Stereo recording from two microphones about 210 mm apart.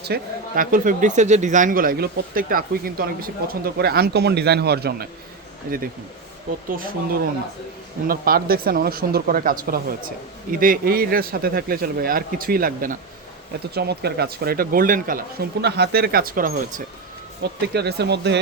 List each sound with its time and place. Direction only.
0.0 s speech: 45° right (ahead or behind)
6.7 s speech: 40° right (ahead or behind)